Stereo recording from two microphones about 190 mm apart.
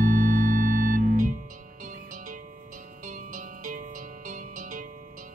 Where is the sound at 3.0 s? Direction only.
45° right (ahead or behind).